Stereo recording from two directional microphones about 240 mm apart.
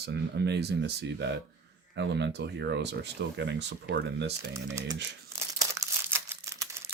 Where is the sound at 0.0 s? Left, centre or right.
Right.